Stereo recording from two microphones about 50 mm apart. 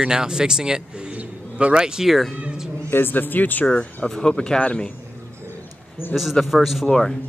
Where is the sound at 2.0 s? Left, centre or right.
Centre.